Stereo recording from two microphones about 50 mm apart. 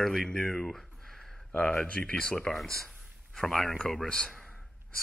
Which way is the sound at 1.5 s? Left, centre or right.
Left.